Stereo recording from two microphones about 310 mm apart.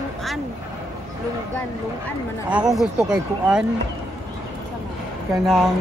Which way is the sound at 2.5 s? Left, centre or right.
Centre.